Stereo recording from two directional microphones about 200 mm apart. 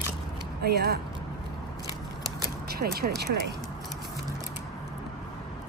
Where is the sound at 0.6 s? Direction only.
55° right (ahead or behind).